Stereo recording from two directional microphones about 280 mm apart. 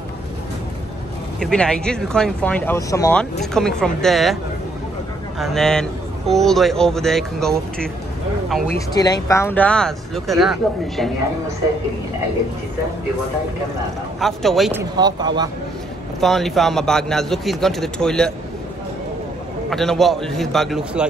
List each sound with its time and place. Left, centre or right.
1.4 s speech: centre
5.4 s speech: centre
8.7 s speech: centre
14.2 s speech: centre
16.2 s speech: centre
19.7 s speech: centre